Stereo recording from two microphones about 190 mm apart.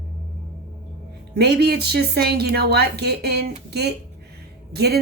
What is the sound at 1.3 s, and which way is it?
A woman's voice, 55° right (ahead or behind).